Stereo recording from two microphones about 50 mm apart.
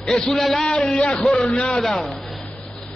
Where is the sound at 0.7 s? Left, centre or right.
Centre.